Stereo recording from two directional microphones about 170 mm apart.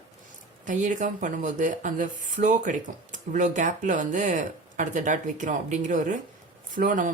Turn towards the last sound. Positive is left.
turn(degrees=-50)  # may be behind; listen again after turning